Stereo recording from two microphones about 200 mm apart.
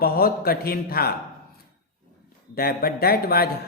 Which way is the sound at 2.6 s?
50° left (ahead or behind).